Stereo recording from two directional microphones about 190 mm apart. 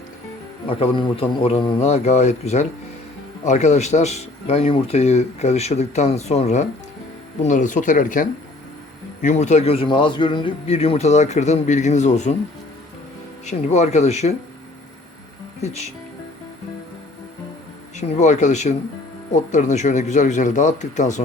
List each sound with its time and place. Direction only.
0.7 s speech: 25° left (ahead or behind)
13.4 s speech: 35° left (ahead or behind)
15.6 s speech: 35° left (ahead or behind)
17.9 s speech: 35° left (ahead or behind)